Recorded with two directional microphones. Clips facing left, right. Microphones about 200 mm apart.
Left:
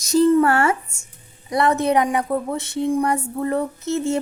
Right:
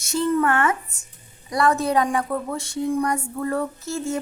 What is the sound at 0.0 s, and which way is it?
A woman's voice, 35° left (ahead or behind).